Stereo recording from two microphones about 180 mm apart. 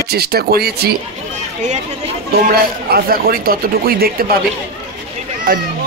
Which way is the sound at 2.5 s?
55° right (ahead or behind).